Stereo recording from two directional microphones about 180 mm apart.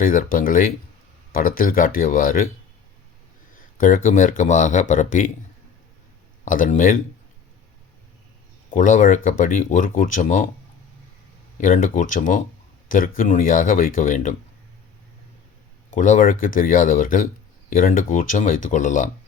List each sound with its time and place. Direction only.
0.0 s speech: 50° left (ahead or behind)
3.8 s speech: 50° left (ahead or behind)
6.4 s speech: 45° left (ahead or behind)
8.7 s speech: 45° left (ahead or behind)
11.5 s speech: 50° left (ahead or behind)
15.9 s speech: 45° left (ahead or behind)